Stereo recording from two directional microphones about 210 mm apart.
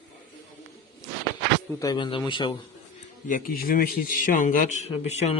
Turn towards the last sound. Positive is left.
turn(degrees=30)  # may be behind; listen again after turning